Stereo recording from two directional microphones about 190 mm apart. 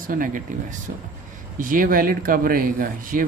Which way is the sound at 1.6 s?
45° right (ahead or behind).